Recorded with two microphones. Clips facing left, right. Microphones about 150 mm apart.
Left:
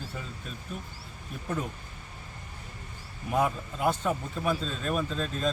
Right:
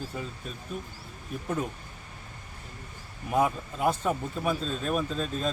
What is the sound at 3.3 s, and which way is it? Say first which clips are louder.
A man's voice: right 2 dB; 5° right (ahead or behind).